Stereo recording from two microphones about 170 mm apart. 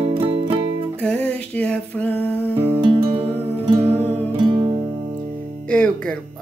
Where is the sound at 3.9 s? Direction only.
40° right (ahead or behind).